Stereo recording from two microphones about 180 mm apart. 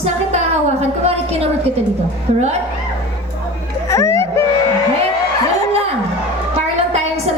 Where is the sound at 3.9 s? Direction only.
15° left (ahead or behind).